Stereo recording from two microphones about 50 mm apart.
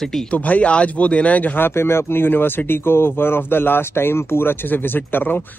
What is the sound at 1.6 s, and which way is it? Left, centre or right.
Speech, left.